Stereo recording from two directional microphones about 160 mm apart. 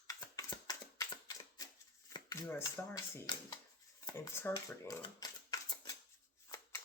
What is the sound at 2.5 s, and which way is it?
Speech, 15° left (ahead or behind).